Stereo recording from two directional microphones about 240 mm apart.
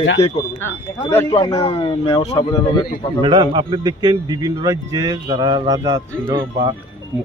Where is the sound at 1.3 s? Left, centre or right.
Centre.